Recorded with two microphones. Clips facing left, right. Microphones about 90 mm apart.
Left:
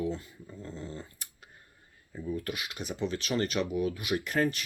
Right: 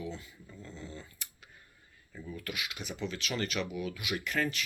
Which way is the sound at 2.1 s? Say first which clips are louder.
Left 8 dB; 20° left (ahead or behind).